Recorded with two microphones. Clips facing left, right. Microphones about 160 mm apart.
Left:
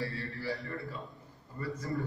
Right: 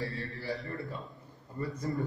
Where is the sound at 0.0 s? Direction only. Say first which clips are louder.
Even; 20° right (ahead or behind).